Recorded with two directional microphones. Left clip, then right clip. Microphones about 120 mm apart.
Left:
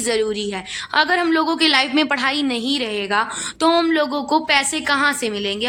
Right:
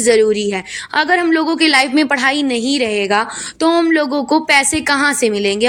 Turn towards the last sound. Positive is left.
turn(degrees=-35)  # may be behind; listen again after turning